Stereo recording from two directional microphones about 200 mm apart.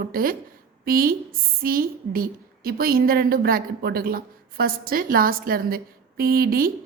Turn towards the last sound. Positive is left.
turn(degrees=-45)  # may be behind; listen again after turning